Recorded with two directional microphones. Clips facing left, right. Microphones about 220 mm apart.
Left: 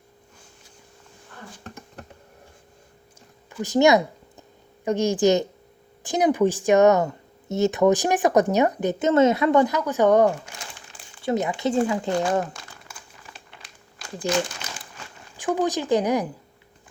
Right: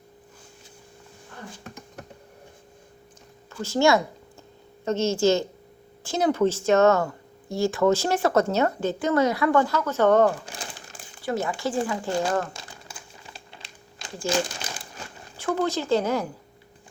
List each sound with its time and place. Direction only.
3.5 s speech: 20° left (ahead or behind)
10.4 s crumpling: 30° right (ahead or behind)
11.2 s speech: 20° left (ahead or behind)
12.5 s crumpling: 30° right (ahead or behind)
15.4 s speech: 15° left (ahead or behind)